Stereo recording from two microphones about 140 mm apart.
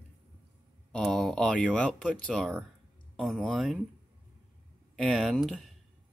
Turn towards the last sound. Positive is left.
turn(degrees=0)  # may be behind; listen again after turning